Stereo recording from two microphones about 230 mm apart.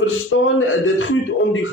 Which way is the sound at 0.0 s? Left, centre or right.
Left.